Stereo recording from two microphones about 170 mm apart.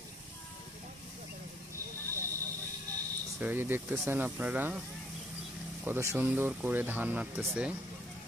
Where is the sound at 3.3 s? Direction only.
10° right (ahead or behind).